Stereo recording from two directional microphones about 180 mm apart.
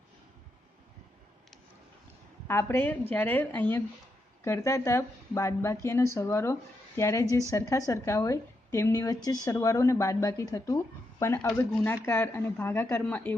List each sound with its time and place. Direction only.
2.4 s speech: 15° left (ahead or behind)